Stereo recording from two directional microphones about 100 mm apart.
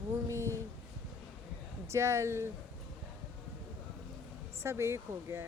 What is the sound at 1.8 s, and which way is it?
Speech, 30° right (ahead or behind).